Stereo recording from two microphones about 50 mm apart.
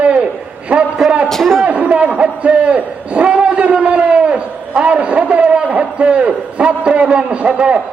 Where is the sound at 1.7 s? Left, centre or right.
Right.